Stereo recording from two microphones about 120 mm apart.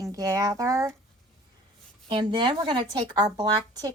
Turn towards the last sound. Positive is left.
turn(degrees=-35)  # may be behind; listen again after turning